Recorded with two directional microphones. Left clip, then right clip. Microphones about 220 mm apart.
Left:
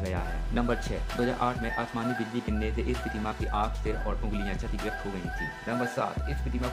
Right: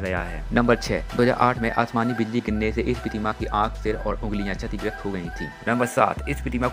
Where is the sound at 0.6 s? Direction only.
30° right (ahead or behind).